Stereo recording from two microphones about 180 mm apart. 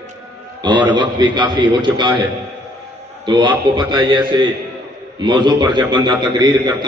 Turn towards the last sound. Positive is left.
turn(degrees=-25)  # may be behind; listen again after turning